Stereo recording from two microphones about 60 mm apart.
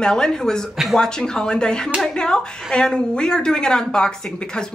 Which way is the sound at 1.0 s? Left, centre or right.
Centre.